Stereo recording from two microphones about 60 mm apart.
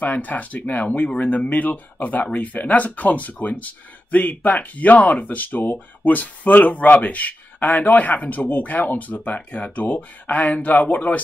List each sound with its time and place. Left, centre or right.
0.0 s speech: left